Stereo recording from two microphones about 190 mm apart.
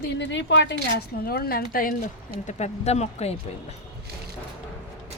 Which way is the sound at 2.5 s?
35° left (ahead or behind).